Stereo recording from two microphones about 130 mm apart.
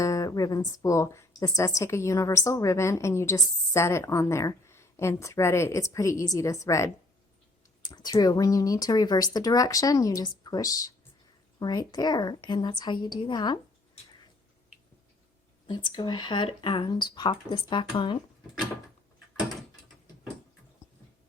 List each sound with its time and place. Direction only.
0.0 s a woman's voice: 25° left (ahead or behind)
15.6 s speech: 35° left (ahead or behind)